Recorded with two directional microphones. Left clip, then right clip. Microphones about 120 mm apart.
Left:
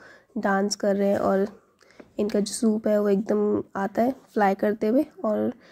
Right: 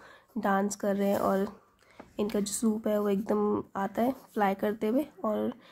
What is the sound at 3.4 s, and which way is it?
Speech, 10° left (ahead or behind).